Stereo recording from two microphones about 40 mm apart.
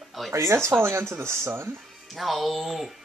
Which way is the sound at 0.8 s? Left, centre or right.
Right.